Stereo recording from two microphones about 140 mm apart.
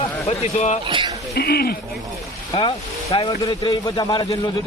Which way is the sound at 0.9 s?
35° right (ahead or behind).